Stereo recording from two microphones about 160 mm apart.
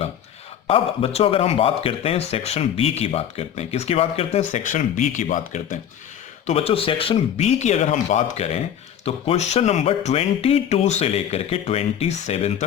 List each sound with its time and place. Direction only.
0.7 s speech: 35° left (ahead or behind); by 5.8 s 50° left (ahead or behind)
6.4 s speech: 40° left (ahead or behind)